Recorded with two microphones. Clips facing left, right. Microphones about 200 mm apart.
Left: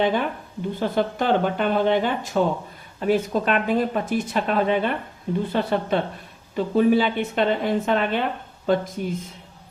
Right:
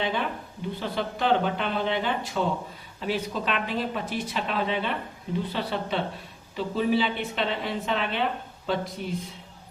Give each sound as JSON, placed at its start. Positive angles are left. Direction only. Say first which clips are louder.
{"t": 0.0, "sound": "a woman's voice", "louder": "left 6 dB", "side_deg": 50}